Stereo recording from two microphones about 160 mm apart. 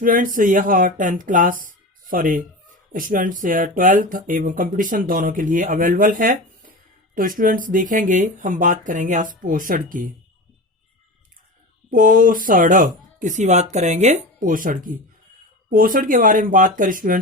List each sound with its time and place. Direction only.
0.0 s speech: 60° right (ahead or behind)
11.9 s speech: 60° right (ahead or behind)